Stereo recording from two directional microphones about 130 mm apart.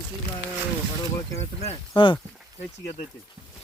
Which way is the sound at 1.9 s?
40° left (ahead or behind).